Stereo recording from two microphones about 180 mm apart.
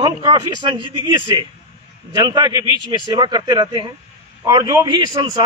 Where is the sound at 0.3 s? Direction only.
25° right (ahead or behind).